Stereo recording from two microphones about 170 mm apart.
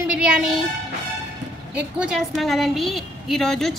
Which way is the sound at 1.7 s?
5° right (ahead or behind).